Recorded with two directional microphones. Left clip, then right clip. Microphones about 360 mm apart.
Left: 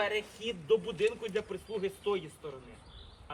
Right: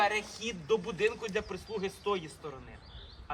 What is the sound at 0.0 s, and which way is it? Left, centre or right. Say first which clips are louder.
A woman's voice: right 3 dB; centre.